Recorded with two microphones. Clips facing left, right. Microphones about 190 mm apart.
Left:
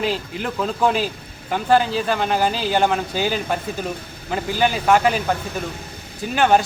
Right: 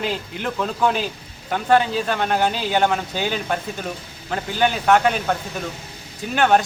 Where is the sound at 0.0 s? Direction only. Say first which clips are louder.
Left 2 dB; centre (ahead or behind).